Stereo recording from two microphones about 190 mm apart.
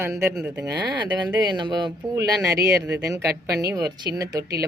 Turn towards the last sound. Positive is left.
turn(degrees=-20)  # may be behind; listen again after turning